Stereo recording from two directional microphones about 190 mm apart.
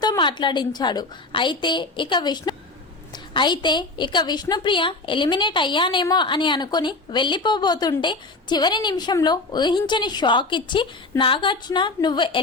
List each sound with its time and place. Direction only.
0.0 s a woman's voice: 20° left (ahead or behind)